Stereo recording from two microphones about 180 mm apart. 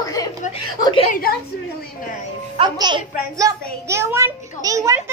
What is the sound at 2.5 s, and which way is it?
A woman's voice, 25° right (ahead or behind).